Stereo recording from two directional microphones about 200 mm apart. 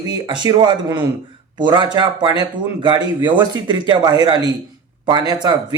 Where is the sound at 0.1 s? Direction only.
20° right (ahead or behind).